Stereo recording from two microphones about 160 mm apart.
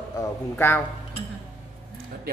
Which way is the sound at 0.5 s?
15° left (ahead or behind).